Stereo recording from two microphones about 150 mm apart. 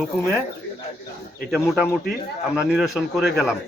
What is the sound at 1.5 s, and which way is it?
Speech, 5° right (ahead or behind).